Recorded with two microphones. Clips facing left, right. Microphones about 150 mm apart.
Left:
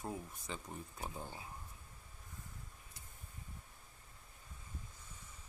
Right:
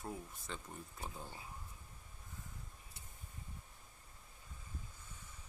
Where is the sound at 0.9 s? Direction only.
15° left (ahead or behind).